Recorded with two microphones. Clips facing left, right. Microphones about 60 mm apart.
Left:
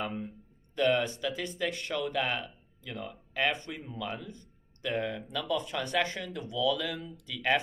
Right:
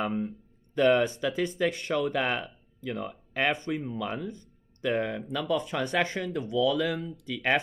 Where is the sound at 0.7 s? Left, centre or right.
Right.